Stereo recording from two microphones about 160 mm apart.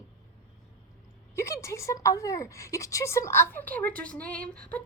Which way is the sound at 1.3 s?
20° left (ahead or behind).